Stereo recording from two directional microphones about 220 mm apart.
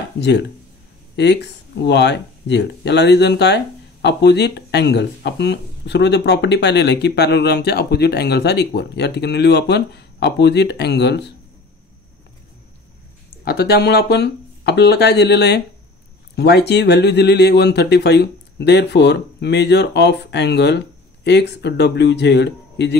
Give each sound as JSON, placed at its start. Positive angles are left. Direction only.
{"t": 0.2, "sound": "speech", "side_deg": 50}
{"t": 13.4, "sound": "speech", "side_deg": 45}